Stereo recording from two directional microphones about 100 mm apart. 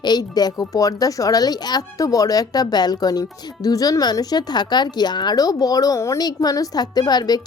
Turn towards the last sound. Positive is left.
turn(degrees=40)  # may be behind; listen again after turning